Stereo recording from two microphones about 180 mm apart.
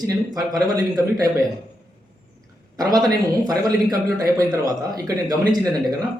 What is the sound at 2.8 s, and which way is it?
Speech, 20° right (ahead or behind).